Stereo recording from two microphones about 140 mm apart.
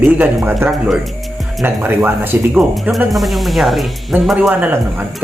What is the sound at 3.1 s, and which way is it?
Speech, centre (ahead or behind).